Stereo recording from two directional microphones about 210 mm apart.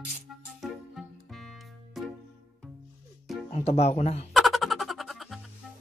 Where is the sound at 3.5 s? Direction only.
30° left (ahead or behind).